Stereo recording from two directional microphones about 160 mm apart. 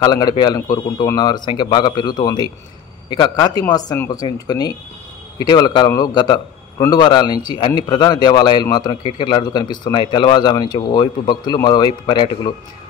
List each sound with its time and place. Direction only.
0.0 s a man's voice: 25° left (ahead or behind)